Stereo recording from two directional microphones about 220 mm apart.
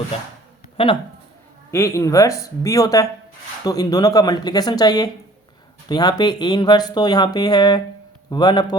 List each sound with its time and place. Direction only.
0.8 s speech: 25° left (ahead or behind)
1.7 s speech: 15° left (ahead or behind)